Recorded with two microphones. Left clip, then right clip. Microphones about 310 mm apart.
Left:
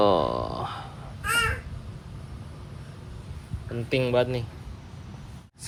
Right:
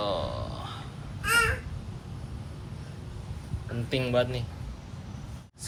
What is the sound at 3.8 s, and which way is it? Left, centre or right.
Speech, centre.